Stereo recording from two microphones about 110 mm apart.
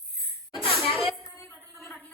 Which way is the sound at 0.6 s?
Centre (ahead or behind).